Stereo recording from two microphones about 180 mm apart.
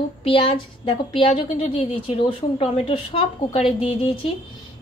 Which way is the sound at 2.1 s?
35° left (ahead or behind).